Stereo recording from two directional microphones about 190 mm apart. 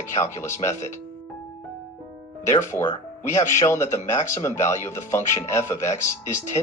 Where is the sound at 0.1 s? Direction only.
15° left (ahead or behind).